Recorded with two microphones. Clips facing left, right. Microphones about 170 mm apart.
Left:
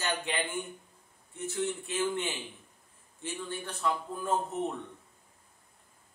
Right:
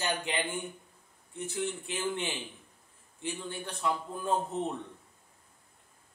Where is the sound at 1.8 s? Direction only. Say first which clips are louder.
Left 2 dB; 15° right (ahead or behind).